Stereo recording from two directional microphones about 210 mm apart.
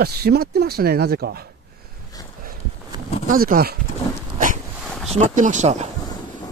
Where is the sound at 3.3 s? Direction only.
40° right (ahead or behind).